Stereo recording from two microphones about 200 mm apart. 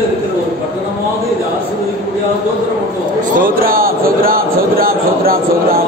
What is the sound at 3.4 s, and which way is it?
Speech, 45° right (ahead or behind).